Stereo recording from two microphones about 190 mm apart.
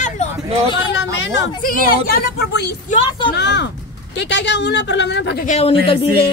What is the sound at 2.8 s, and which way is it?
Speech, 30° left (ahead or behind).